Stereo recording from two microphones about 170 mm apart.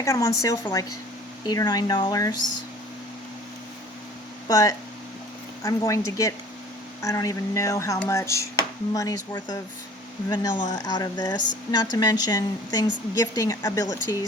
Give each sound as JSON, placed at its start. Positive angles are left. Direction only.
{"t": 0.0, "sound": "speech", "side_deg": 20}
{"t": 4.4, "sound": "speech", "side_deg": 20}